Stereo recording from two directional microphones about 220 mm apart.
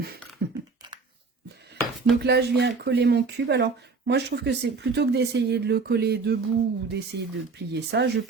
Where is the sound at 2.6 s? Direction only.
50° right (ahead or behind).